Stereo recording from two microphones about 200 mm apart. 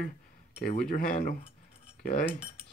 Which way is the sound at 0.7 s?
45° left (ahead or behind).